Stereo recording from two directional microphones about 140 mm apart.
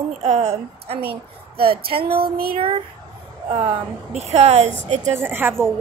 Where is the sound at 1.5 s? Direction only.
90° right.